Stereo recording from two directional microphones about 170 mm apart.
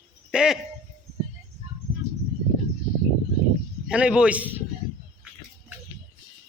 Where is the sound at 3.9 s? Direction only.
5° right (ahead or behind).